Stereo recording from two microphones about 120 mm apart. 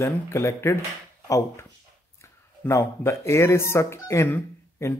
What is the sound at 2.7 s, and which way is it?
Speech, 25° left (ahead or behind).